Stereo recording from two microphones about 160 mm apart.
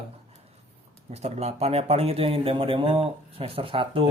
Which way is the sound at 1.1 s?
40° right (ahead or behind).